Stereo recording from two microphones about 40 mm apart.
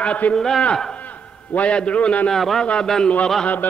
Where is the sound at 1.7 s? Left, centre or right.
Left.